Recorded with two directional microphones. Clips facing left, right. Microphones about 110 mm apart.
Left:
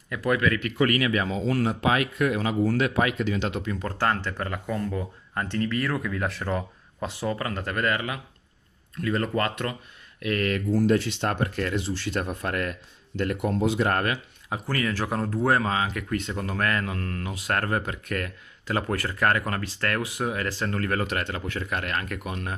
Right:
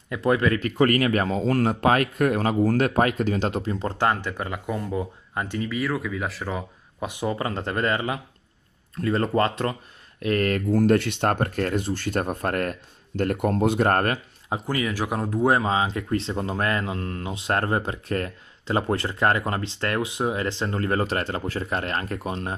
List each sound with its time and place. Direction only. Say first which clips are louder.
0.1 s speech: right 3 dB; 25° right (ahead or behind)
3.8 s speech: right 2 dB; 15° right (ahead or behind)
7.1 s speech: right 2 dB; 20° right (ahead or behind); by 14.2 s 45° right (ahead or behind)
14.5 s speech: right 2 dB; 15° right (ahead or behind); by 22.6 s 30° right (ahead or behind)